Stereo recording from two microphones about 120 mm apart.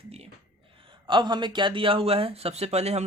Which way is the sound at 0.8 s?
45° right (ahead or behind).